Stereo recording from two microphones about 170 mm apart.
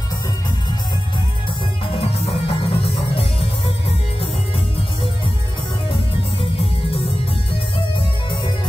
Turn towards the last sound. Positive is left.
turn(degrees=35)  # may be behind; listen again after turning